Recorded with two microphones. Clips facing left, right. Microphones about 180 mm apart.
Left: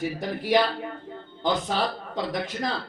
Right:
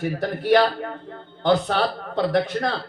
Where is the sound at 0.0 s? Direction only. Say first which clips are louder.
Right 4 dB; 65° right (ahead or behind).